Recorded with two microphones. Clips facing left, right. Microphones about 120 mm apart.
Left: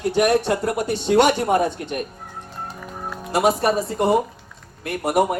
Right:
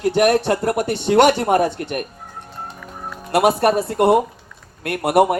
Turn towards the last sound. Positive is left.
turn(degrees=-65)  # may be behind; listen again after turning